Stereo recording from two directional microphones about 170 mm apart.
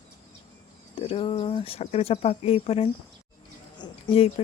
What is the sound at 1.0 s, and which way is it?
Speech, 35° left (ahead or behind).